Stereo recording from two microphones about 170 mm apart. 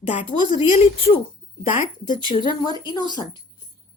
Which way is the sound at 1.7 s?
50° left (ahead or behind).